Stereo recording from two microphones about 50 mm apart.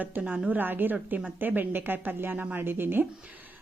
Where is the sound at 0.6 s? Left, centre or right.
Right.